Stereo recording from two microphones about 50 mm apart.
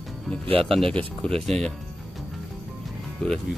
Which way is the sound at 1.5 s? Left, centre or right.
Centre.